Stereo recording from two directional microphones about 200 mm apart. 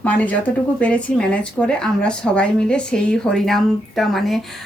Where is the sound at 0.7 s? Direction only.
5° left (ahead or behind).